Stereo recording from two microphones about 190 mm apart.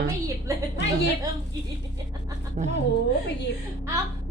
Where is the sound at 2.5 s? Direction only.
35° right (ahead or behind).